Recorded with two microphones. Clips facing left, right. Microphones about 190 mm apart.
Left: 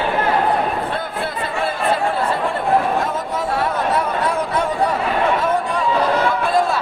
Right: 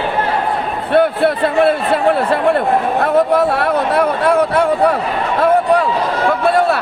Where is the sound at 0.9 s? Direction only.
65° right (ahead or behind).